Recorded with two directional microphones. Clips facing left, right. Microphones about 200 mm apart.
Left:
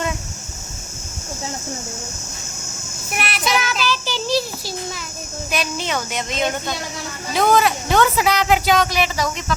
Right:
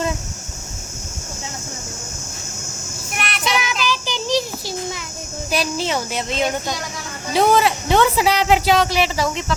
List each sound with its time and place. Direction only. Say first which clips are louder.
3.2 s child singing: left 2 dB; 5° left (ahead or behind)
3.6 s child singing: even; 15° right (ahead or behind)
5.5 s speech: right 3 dB; 30° right (ahead or behind)